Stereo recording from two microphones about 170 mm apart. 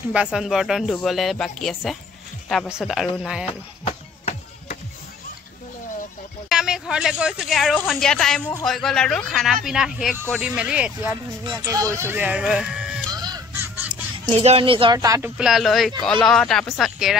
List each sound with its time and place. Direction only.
0.1 s speech: 5° right (ahead or behind)
3.8 s a sound: 40° left (ahead or behind)
6.5 s speech: 5° right (ahead or behind)
11.4 s speech: 20° right (ahead or behind); by 13.0 s 5° right (ahead or behind)
13.1 s a sound: 25° right (ahead or behind)
14.1 s speech: 30° right (ahead or behind)
15.3 s speech: 5° right (ahead or behind)